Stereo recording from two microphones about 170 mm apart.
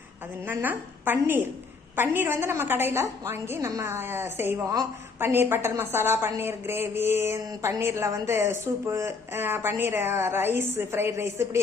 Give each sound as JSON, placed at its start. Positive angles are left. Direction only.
{"t": 0.4, "sound": "a woman's voice", "side_deg": -10}